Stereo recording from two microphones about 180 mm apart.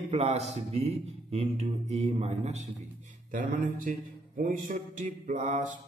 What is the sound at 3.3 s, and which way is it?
Mantra, 50° right (ahead or behind).